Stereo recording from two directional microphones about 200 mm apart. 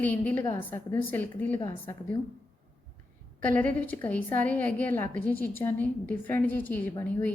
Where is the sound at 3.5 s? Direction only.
10° left (ahead or behind).